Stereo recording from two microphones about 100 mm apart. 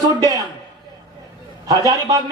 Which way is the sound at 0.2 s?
35° right (ahead or behind).